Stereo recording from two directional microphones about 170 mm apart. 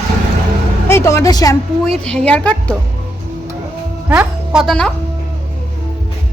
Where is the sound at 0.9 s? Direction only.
15° left (ahead or behind).